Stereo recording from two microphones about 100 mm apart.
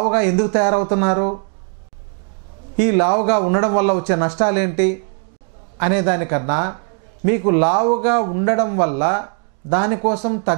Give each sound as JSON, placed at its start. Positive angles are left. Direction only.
{"t": 0.0, "sound": "speech", "side_deg": -15}
{"t": 2.8, "sound": "speech", "side_deg": -15}